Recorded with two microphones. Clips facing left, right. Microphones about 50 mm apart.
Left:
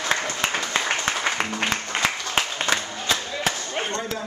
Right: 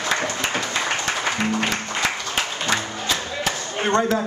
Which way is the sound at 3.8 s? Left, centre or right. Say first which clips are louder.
Right 11 dB; right.